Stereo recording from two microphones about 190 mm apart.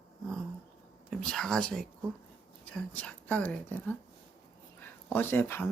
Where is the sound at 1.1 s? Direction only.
Centre (ahead or behind).